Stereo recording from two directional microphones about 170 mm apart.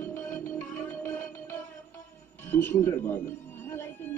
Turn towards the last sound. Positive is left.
turn(degrees=15)  # may be behind; listen again after turning